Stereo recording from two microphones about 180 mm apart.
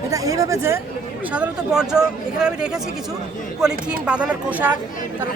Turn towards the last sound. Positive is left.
turn(degrees=-10)  # may be behind; listen again after turning